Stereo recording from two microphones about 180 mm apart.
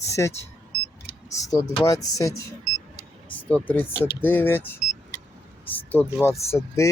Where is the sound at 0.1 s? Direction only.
15° left (ahead or behind).